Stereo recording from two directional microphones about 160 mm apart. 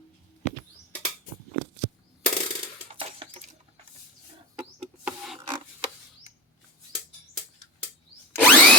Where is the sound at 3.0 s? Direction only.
35° right (ahead or behind).